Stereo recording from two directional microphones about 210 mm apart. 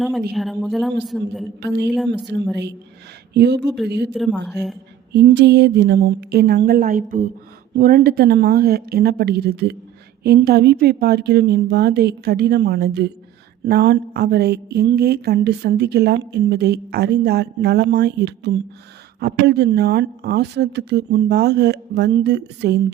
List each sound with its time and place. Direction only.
0.3 s a woman's voice: centre (ahead or behind)
1.6 s a woman's voice: 55° right (ahead or behind)
2.1 s a woman's voice: centre (ahead or behind)
3.3 s a woman's voice: 50° right (ahead or behind)
4.1 s a woman's voice: centre (ahead or behind)
5.1 s a woman's voice: 55° right (ahead or behind)